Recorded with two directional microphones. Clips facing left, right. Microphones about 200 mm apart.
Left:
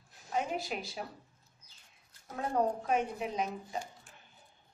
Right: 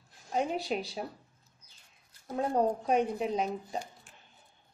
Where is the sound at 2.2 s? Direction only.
30° right (ahead or behind).